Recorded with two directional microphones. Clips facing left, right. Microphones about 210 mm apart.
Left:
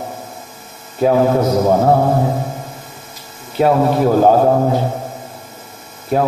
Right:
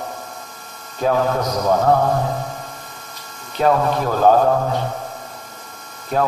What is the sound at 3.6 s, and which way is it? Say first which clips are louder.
A man's voice: left 4 dB; 35° left (ahead or behind).